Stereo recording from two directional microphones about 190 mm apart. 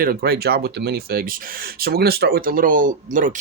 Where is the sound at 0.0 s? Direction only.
50° right (ahead or behind).